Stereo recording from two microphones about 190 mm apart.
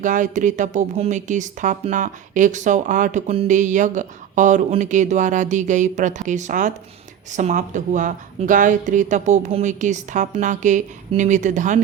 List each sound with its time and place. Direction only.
0.0 s speech: 40° right (ahead or behind)